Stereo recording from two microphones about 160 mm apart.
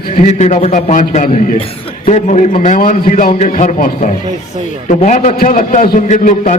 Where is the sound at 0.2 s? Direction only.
45° left (ahead or behind).